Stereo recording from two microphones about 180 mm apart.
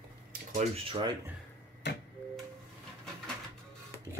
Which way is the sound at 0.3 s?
45° right (ahead or behind).